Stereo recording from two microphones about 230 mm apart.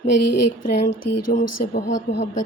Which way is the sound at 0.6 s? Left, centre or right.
Left.